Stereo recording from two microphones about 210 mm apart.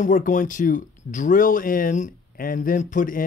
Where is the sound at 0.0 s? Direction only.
40° left (ahead or behind).